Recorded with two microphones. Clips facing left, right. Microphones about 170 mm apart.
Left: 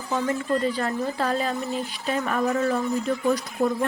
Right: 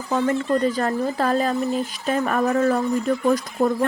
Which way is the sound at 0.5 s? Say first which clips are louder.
Right 4 dB; 45° right (ahead or behind).